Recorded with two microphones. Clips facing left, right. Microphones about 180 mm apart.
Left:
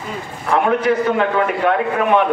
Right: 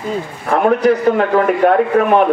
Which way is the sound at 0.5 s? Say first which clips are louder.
Right 3 dB; 40° right (ahead or behind).